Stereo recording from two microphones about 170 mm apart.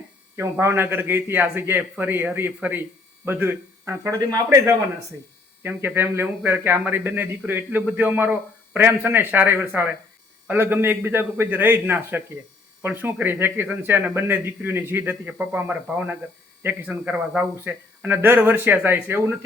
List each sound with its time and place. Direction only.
0.3 s speech: 15° right (ahead or behind)